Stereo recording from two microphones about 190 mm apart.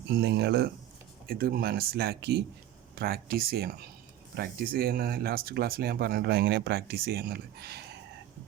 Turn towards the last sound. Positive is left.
turn(degrees=-55)  # may be behind; listen again after turning